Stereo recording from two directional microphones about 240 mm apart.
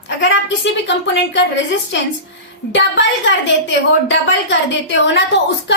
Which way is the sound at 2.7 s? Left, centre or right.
Left.